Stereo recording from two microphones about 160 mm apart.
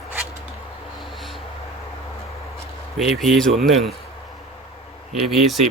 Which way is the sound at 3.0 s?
Centre (ahead or behind).